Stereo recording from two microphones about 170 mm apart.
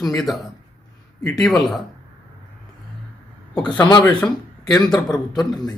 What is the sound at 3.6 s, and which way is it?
Speech, 25° left (ahead or behind).